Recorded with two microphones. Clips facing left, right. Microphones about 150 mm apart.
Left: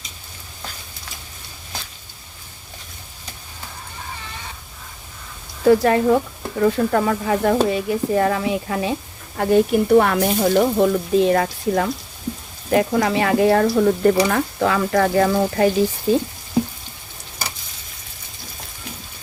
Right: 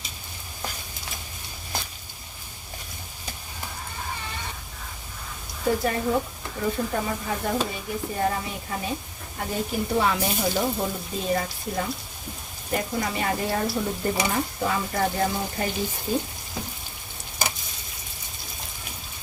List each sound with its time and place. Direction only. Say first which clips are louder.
5.6 s speech: left 10 dB; 90° left
9.4 s speech: left 12 dB; 65° left (ahead or behind); by 16.2 s 90° left